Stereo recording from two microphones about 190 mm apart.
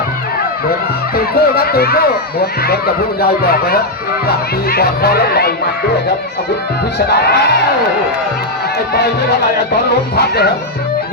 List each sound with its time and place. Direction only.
1.1 s speech: 55° left (ahead or behind)
7.1 s speech: 60° left (ahead or behind)
10.2 s speech: 55° left (ahead or behind)